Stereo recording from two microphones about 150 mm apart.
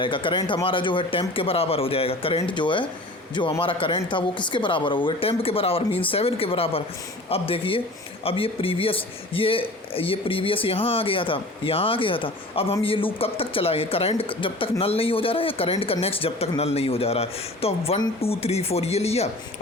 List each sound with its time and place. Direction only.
0.0 s speech: 35° left (ahead or behind)